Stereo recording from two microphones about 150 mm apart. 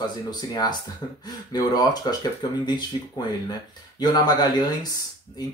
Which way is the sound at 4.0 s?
25° left (ahead or behind).